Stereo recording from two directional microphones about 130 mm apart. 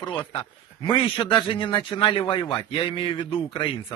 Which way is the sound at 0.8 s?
40° left (ahead or behind).